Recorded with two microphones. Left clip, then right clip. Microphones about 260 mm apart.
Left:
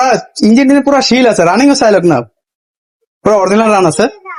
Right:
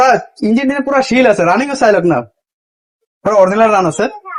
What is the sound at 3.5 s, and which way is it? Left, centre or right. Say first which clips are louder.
Speech: left 2 dB; left.